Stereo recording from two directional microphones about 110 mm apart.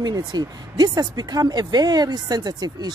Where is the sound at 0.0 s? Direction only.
40° right (ahead or behind).